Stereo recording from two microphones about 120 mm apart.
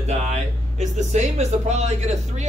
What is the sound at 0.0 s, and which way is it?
Speech, 65° right (ahead or behind).